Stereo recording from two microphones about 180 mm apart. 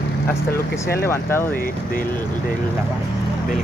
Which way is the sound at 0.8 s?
15° left (ahead or behind).